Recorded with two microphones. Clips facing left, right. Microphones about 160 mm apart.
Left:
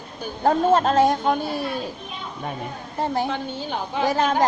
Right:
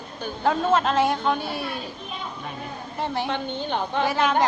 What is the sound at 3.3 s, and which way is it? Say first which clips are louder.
Speech: right 1 dB; 5° left (ahead or behind).